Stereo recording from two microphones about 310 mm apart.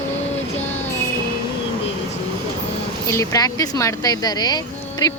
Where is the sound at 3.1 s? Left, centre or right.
Centre.